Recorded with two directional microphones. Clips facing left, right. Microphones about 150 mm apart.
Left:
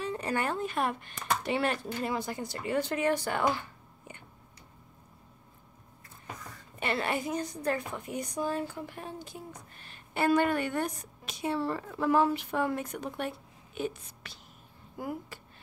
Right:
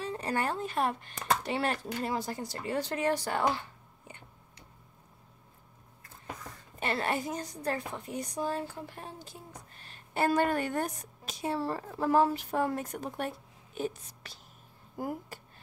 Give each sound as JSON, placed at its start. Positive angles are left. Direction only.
{"t": 0.0, "sound": "a woman's voice", "side_deg": -35}
{"t": 4.1, "sound": "a sound", "side_deg": -30}
{"t": 6.8, "sound": "a woman's voice", "side_deg": -40}